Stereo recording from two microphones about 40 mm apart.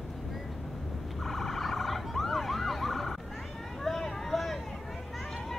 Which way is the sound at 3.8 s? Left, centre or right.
Centre.